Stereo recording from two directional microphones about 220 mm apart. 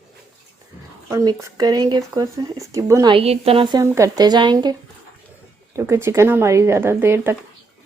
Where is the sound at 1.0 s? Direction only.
15° right (ahead or behind).